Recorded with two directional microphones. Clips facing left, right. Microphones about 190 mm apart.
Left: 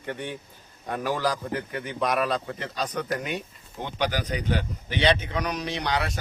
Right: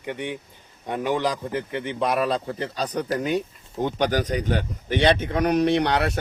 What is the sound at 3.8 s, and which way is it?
Speech, 45° right (ahead or behind).